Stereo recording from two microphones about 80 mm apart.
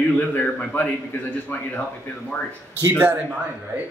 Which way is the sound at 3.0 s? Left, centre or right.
Right.